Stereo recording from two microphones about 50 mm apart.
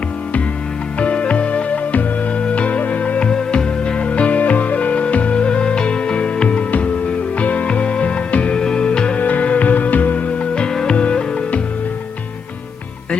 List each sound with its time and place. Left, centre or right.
0.9 s music: left